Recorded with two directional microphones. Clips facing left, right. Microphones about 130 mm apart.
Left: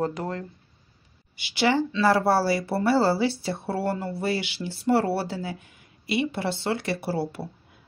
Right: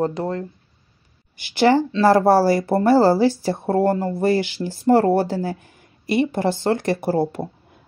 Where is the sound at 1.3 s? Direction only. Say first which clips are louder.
Right 7 dB; 45° right (ahead or behind).